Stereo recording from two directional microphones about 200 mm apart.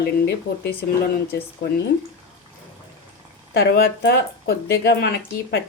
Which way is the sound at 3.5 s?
50° left (ahead or behind).